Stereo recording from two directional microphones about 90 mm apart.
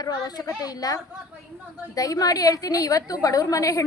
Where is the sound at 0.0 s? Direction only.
45° left (ahead or behind).